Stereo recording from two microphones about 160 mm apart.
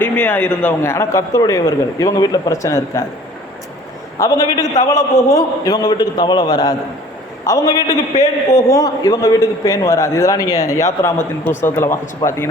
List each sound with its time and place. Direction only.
0.0 s a man's voice: 10° left (ahead or behind)
4.2 s a man's voice: 25° left (ahead or behind)
4.6 s a man's voice: 50° left (ahead or behind)
4.9 s a man's voice: 20° left (ahead or behind)
7.9 s a man's voice: 45° left (ahead or behind)
8.5 s a man's voice: 20° left (ahead or behind)